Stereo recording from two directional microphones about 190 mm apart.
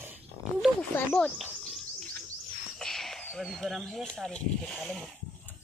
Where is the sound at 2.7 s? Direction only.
Centre (ahead or behind).